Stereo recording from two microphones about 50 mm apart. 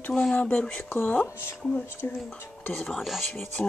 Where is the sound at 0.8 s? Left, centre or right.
Left.